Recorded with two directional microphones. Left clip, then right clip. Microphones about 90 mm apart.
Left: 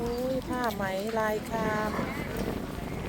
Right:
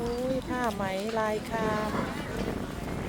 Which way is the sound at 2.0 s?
Centre (ahead or behind).